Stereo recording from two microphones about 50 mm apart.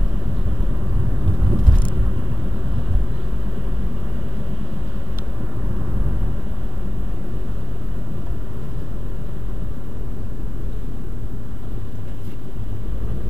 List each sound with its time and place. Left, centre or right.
1.2 s vehicle: centre